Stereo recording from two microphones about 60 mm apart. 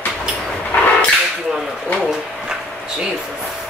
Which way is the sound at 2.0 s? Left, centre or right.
Centre.